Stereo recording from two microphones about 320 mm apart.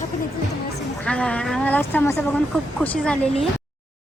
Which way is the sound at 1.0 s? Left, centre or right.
Centre.